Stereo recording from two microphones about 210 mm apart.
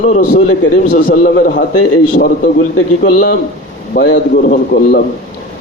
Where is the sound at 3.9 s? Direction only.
55° left (ahead or behind).